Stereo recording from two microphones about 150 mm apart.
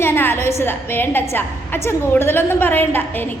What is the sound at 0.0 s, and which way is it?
A woman's voice, 15° left (ahead or behind).